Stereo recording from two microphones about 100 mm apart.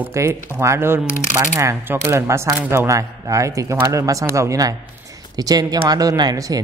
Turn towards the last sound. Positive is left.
turn(degrees=-40)  # may be behind; listen again after turning